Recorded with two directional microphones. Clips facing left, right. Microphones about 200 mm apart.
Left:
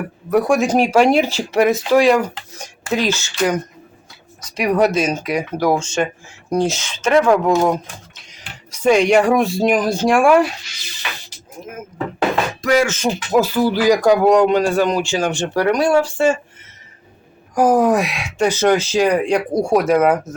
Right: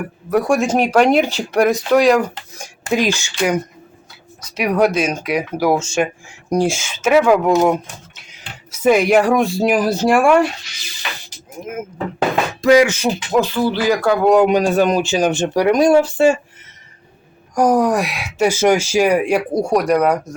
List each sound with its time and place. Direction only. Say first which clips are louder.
0.3 s speech: left 1 dB; centre (ahead or behind)
2.6 s speech: right 2 dB; 15° right (ahead or behind)
4.5 s speech: even; centre (ahead or behind)
12.6 s speech: right 5 dB; 15° right (ahead or behind)
13.3 s speech: left 2 dB; 10° left (ahead or behind)
14.4 s speech: right 1 dB; 15° right (ahead or behind)
17.5 s speech: left 1 dB; 5° left (ahead or behind)